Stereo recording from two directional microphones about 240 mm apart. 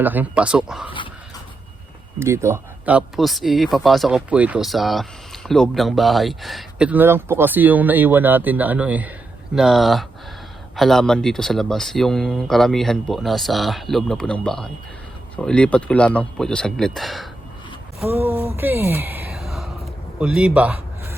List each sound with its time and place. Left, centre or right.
0.0 s speech: centre
2.1 s speech: centre
18.0 s a sound: centre